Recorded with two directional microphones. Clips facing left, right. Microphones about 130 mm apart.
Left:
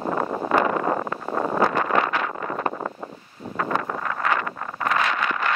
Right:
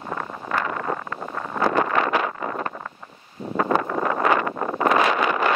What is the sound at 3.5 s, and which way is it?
Wind noise, 20° right (ahead or behind).